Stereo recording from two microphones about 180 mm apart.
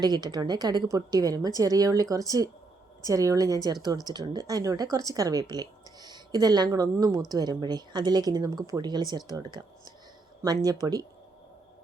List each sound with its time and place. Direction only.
0.0 s speech: 20° right (ahead or behind)